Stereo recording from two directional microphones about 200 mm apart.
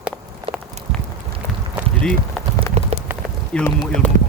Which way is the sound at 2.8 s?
35° right (ahead or behind).